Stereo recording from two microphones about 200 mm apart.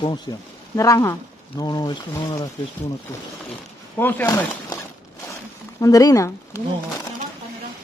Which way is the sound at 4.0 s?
10° left (ahead or behind).